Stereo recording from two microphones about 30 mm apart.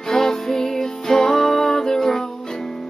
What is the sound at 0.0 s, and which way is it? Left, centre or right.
Music, centre.